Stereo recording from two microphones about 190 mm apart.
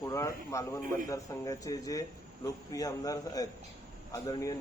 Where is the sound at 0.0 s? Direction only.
20° left (ahead or behind).